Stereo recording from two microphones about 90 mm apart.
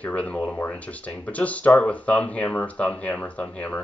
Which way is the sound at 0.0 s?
15° left (ahead or behind).